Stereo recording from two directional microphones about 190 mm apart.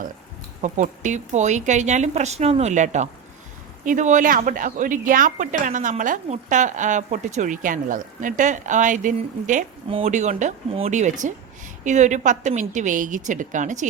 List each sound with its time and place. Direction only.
0.6 s a woman's voice: 40° right (ahead or behind)